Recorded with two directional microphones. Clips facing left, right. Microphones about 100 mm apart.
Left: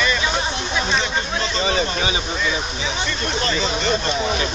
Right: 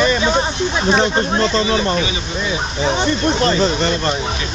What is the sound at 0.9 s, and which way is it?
Speech, 40° right (ahead or behind).